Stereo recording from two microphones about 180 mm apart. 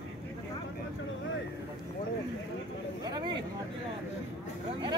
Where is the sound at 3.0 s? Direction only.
25° right (ahead or behind).